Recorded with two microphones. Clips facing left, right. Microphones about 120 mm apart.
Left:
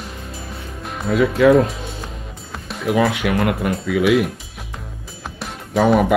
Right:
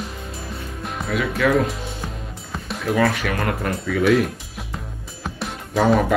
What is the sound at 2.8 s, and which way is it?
Music, 15° left (ahead or behind).